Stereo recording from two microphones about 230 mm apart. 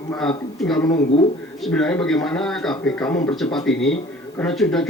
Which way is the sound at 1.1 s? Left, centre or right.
Left.